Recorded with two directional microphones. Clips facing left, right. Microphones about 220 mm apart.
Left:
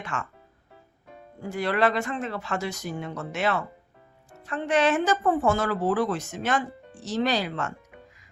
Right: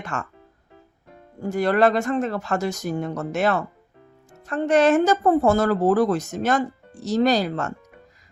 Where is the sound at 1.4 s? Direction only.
45° right (ahead or behind).